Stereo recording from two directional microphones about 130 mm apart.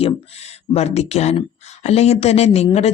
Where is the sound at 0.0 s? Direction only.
50° left (ahead or behind).